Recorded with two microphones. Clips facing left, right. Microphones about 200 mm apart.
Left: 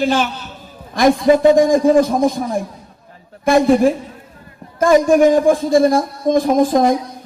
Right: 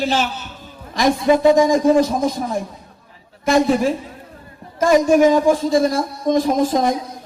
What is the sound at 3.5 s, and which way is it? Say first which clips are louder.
Speech: left 4 dB; 55° left (ahead or behind).